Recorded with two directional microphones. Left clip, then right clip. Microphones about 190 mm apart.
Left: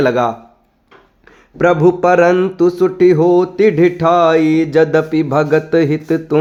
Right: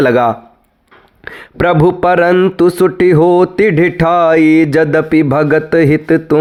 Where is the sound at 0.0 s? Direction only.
30° right (ahead or behind).